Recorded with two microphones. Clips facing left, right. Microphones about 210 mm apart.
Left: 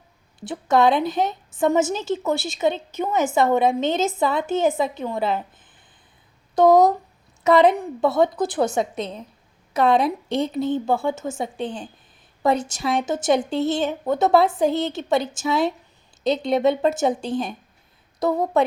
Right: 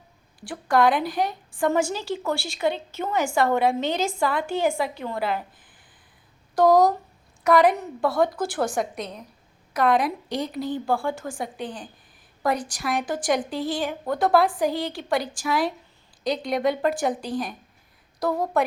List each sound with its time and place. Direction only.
0.3 s a woman's voice: 20° left (ahead or behind)
6.6 s a woman's voice: 20° left (ahead or behind)